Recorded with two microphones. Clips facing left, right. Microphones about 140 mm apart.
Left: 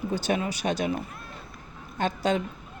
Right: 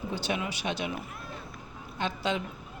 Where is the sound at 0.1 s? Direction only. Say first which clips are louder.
Left 5 dB; 45° left (ahead or behind).